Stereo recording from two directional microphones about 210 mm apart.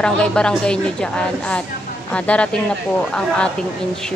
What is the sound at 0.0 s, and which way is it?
A woman's voice, 5° left (ahead or behind).